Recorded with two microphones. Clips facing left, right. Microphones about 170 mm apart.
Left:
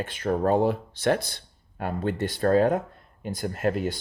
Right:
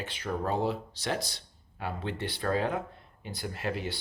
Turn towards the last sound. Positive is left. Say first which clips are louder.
# left 8 dB
turn(degrees=45)  # may be behind; listen again after turning